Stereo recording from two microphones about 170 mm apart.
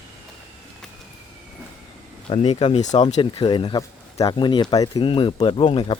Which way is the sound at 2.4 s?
30° left (ahead or behind).